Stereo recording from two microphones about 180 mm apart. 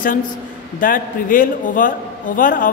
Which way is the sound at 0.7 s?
50° left (ahead or behind).